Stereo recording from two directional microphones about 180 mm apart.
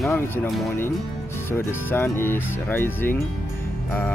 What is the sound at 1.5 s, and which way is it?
Speech, 10° left (ahead or behind).